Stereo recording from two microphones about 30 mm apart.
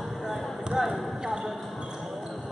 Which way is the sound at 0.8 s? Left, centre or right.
Centre.